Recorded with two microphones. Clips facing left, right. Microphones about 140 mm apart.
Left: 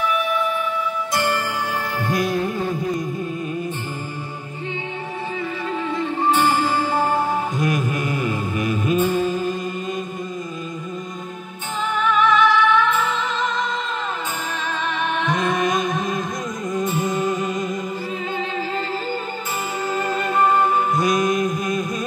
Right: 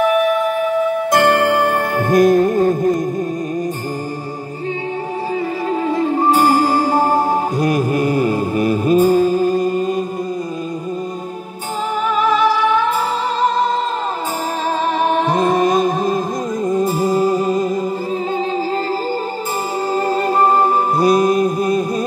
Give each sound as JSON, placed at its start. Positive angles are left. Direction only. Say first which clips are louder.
{"t": 0.0, "sound": "music", "louder": "right 7 dB", "side_deg": -50}
{"t": 5.7, "sound": "music", "louder": "right 7 dB", "side_deg": -40}
{"t": 12.1, "sound": "music", "louder": "right 1 dB", "side_deg": -35}
{"t": 14.9, "sound": "music", "louder": "right 6 dB", "side_deg": -35}
{"t": 19.9, "sound": "music", "louder": "right 6 dB", "side_deg": -35}